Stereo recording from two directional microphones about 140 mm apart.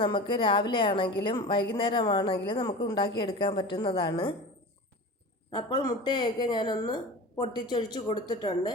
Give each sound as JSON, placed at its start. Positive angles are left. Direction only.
{"t": 0.0, "sound": "a woman's voice", "side_deg": 35}
{"t": 5.5, "sound": "a woman's voice", "side_deg": 35}